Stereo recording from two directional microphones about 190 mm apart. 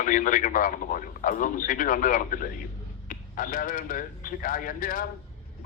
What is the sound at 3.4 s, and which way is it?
Speech, 45° left (ahead or behind).